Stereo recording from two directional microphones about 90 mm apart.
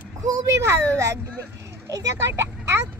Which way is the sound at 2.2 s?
30° right (ahead or behind).